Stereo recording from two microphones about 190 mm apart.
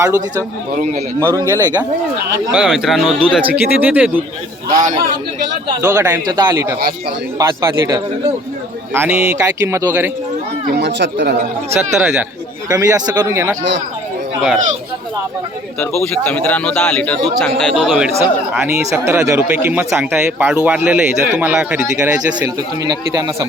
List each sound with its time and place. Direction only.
0.0 s a man's voice: 15° right (ahead or behind)
2.5 s speech: 5° right (ahead or behind)
5.8 s a man's voice: 15° right (ahead or behind)
10.7 s speech: 60° right (ahead or behind)
11.9 s speech: 10° right (ahead or behind)
15.8 s a man's voice: 10° left (ahead or behind)
18.2 s speech: 15° right (ahead or behind)
22.4 s a man's voice: 20° right (ahead or behind)